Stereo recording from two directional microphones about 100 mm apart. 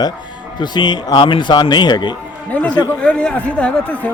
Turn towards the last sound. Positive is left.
turn(degrees=15)  # may be behind; listen again after turning